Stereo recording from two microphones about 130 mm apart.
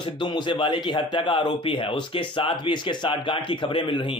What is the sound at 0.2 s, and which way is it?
A man's voice, 40° left (ahead or behind).